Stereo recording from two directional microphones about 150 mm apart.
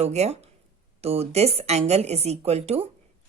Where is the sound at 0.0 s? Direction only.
45° right (ahead or behind).